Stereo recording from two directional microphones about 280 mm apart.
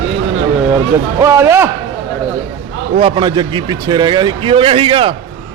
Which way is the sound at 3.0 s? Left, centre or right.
Centre.